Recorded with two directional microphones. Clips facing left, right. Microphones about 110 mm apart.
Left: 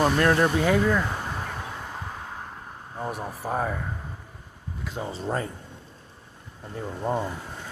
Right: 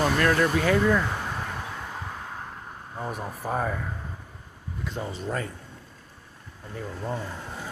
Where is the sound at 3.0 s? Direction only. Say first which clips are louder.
Left 1 dB; 5° left (ahead or behind).